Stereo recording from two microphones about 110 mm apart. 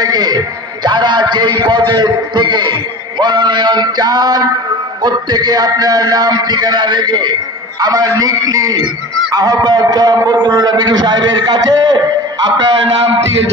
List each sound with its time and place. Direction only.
0.0 s music: 40° right (ahead or behind)
0.8 s a man's voice: 40° right (ahead or behind)
12.6 s a man's voice: 50° right (ahead or behind)